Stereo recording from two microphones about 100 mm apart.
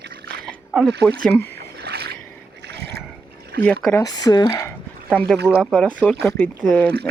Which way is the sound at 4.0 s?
40° left (ahead or behind).